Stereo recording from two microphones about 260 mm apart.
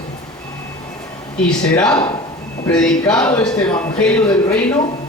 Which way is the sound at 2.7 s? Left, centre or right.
Centre.